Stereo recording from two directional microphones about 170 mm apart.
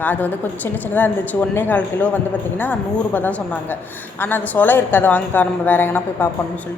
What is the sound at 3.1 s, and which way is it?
A woman's voice, 10° left (ahead or behind).